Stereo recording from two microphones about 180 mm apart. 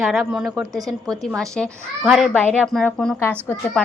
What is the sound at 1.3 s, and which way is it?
A woman's voice, 5° left (ahead or behind).